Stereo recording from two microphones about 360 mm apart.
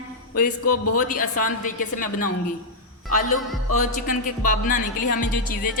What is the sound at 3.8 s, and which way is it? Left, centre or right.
Music, left.